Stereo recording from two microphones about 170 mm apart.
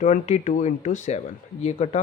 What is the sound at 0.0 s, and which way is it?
Speech, 45° left (ahead or behind).